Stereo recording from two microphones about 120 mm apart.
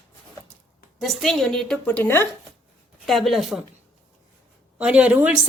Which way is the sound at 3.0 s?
Centre (ahead or behind).